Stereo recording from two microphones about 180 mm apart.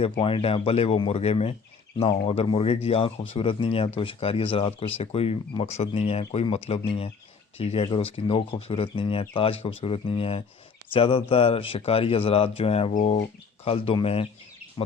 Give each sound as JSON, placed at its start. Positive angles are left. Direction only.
{"t": 0.0, "sound": "speech", "side_deg": 30}
{"t": 13.7, "sound": "speech", "side_deg": 30}